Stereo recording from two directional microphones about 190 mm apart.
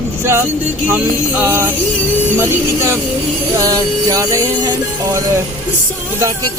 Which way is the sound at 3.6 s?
20° right (ahead or behind).